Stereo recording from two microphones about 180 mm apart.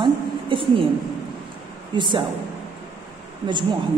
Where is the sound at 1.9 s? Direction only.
25° right (ahead or behind).